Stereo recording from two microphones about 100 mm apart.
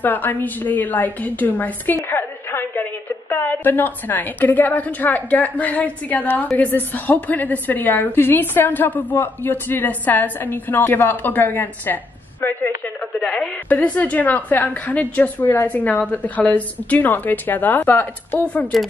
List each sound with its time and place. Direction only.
0.0 s a woman's voice: 20° left (ahead or behind)